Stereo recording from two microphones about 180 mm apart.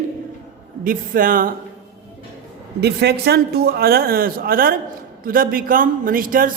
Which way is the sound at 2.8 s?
65° right (ahead or behind).